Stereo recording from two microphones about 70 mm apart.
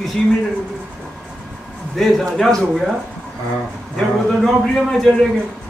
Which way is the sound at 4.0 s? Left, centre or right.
Centre.